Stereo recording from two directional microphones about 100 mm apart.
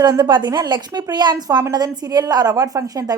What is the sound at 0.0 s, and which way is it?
A woman's voice, 45° right (ahead or behind).